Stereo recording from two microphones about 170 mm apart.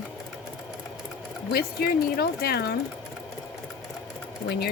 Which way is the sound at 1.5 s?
70° left (ahead or behind).